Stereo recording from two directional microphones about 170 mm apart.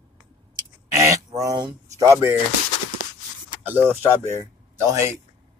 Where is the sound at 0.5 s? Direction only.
20° right (ahead or behind).